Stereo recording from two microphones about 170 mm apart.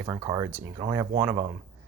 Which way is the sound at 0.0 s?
20° right (ahead or behind).